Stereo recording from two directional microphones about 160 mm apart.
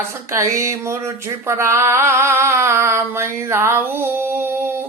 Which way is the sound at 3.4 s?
15° right (ahead or behind).